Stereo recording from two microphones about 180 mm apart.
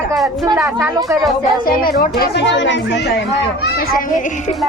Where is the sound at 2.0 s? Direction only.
60° left (ahead or behind).